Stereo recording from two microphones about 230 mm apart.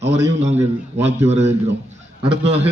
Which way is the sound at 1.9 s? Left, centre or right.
Right.